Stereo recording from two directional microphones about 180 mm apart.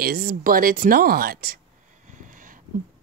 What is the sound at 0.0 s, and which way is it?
Speech, 55° right (ahead or behind).